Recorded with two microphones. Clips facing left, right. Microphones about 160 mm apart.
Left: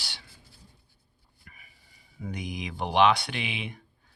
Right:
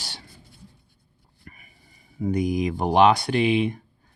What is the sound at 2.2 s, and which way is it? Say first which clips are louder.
Speech: right 13 dB; 45° right (ahead or behind).